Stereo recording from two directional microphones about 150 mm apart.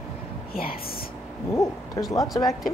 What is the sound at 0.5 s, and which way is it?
Speech, 80° left.